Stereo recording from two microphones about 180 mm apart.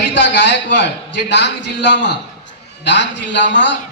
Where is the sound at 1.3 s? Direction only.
75° left (ahead or behind).